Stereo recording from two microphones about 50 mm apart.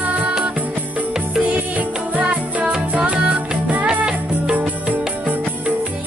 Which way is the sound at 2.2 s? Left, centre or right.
Right.